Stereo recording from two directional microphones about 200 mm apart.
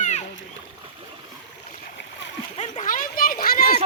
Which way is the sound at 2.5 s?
35° left (ahead or behind).